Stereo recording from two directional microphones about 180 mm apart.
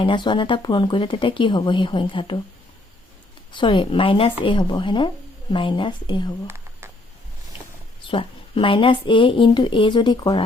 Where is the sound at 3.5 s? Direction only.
25° left (ahead or behind).